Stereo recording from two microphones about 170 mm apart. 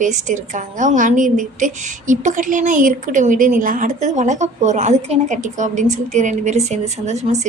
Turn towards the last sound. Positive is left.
turn(degrees=-40)  # may be behind; listen again after turning